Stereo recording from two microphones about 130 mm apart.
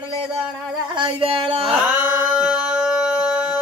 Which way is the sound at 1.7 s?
5° right (ahead or behind).